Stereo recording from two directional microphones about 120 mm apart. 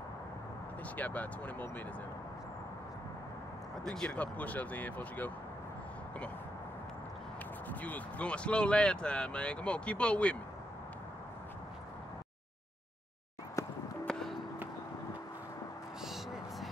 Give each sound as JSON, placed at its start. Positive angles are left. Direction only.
{"t": 0.9, "sound": "speech", "side_deg": 15}
{"t": 3.8, "sound": "speech", "side_deg": 5}
{"t": 7.8, "sound": "speech", "side_deg": 10}
{"t": 13.6, "sound": "music", "side_deg": 25}